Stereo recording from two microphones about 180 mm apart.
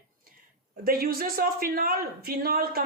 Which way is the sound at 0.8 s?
55° right (ahead or behind).